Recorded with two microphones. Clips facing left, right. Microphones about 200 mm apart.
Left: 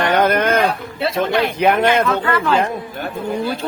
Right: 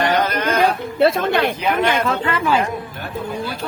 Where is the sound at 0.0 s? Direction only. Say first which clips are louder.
Left 3 dB; 55° left (ahead or behind).